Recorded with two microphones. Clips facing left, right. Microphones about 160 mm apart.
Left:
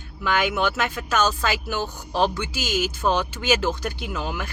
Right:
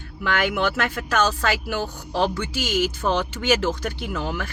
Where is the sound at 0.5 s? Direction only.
60° right (ahead or behind).